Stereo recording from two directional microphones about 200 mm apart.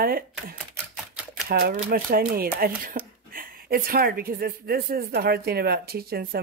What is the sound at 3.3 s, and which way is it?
Speech, 45° right (ahead or behind).